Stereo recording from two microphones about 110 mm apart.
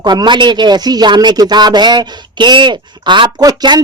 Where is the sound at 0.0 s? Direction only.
40° right (ahead or behind).